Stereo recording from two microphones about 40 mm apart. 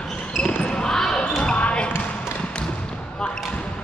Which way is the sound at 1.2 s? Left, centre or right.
Left.